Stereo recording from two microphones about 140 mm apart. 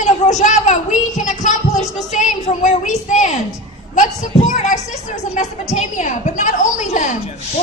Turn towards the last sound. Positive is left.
turn(degrees=65)  # may be behind; listen again after turning